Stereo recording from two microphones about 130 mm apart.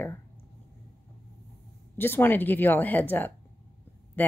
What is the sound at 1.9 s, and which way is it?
Speech, 15° left (ahead or behind).